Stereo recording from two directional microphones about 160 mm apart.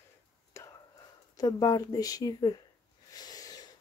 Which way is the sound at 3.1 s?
25° left (ahead or behind).